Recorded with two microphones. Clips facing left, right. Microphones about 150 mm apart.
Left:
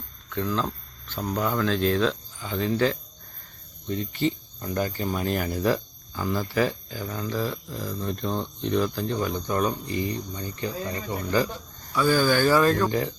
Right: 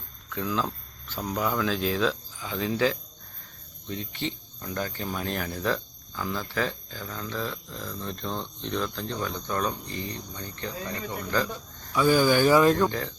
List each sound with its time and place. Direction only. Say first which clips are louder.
0.3 s speech: left 2 dB; 5° right (ahead or behind)
11.9 s speech: right 1 dB; 15° right (ahead or behind)
12.9 s speech: left 6 dB; 15° left (ahead or behind)